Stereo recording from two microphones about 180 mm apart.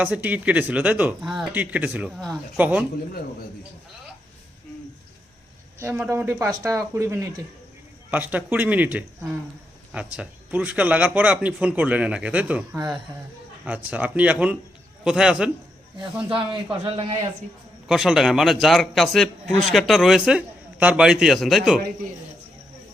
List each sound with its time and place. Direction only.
0.0 s a man's voice: 10° right (ahead or behind)
5.8 s a man's voice: 15° right (ahead or behind)
16.8 s a man's voice: 35° right (ahead or behind)
17.8 s a man's voice: 5° right (ahead or behind)